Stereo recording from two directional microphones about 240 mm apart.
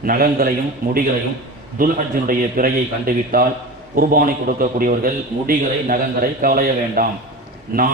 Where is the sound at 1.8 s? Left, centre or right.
Right.